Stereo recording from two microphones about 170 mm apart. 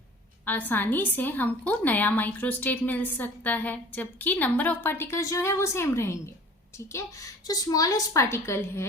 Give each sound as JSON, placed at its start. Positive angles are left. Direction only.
{"t": 0.4, "sound": "a woman's voice", "side_deg": 10}